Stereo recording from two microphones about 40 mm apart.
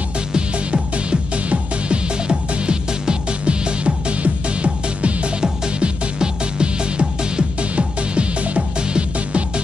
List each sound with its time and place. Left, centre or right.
0.3 s music: right